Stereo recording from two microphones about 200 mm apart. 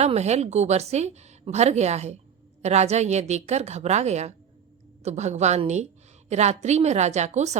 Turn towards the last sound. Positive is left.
turn(degrees=-35)  # may be behind; listen again after turning